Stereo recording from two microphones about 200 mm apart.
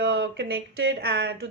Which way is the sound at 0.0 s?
60° right (ahead or behind).